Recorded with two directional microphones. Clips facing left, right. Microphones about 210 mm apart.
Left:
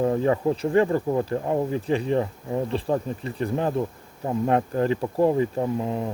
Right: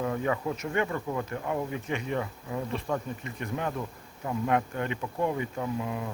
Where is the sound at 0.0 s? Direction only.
35° left (ahead or behind).